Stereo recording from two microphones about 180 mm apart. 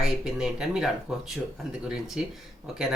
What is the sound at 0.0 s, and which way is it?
Speech, 5° right (ahead or behind).